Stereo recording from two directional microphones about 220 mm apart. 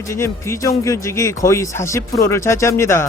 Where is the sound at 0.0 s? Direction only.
15° left (ahead or behind).